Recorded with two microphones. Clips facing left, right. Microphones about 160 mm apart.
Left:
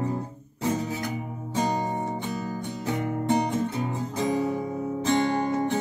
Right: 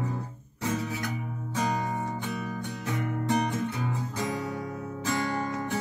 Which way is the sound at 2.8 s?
30° left (ahead or behind).